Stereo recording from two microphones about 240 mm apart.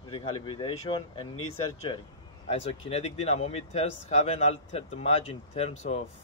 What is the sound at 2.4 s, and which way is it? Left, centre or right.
Speech, left.